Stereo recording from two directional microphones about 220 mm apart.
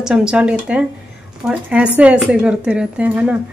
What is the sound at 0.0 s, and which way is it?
A woman's voice, 5° right (ahead or behind).